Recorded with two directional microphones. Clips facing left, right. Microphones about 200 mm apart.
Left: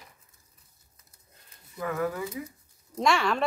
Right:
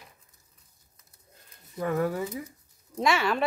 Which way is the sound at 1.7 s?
30° right (ahead or behind).